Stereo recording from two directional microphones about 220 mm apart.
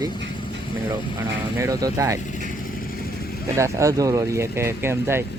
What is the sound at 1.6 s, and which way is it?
Speech, 15° right (ahead or behind).